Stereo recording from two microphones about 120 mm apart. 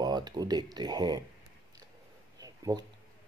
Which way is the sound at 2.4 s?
30° right (ahead or behind).